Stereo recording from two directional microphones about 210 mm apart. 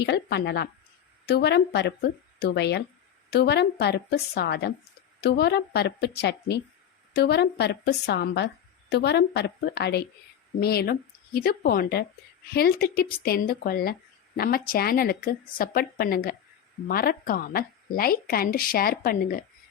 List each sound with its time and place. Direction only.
0.0 s a woman's voice: 55° left (ahead or behind)